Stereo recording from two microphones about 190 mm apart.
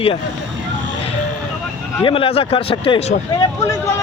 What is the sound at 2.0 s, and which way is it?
Speech, 30° left (ahead or behind).